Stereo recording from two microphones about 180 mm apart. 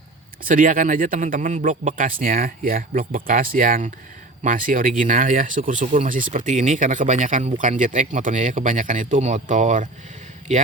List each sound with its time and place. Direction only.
0.4 s speech: 50° right (ahead or behind)